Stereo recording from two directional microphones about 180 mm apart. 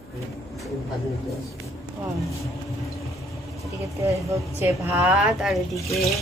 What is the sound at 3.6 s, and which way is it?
Speech, 15° right (ahead or behind).